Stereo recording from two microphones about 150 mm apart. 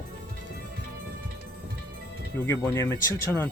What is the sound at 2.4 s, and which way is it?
Speech, 15° left (ahead or behind).